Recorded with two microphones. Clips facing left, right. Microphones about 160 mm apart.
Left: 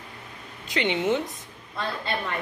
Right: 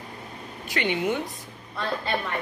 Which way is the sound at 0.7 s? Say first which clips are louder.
Left 2 dB; 20° left (ahead or behind).